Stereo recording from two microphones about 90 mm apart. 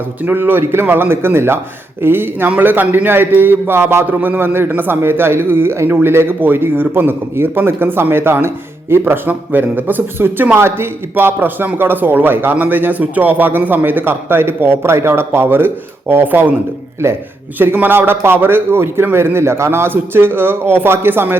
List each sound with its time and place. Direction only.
0.2 s a man's voice: 20° right (ahead or behind)